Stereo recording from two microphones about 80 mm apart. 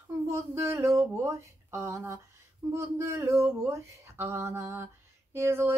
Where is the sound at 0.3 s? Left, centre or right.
Right.